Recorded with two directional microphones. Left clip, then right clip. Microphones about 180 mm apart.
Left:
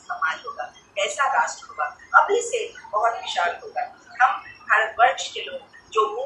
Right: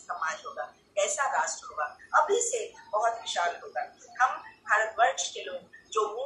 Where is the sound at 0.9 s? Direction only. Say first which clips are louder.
Left 6 dB; 35° right (ahead or behind).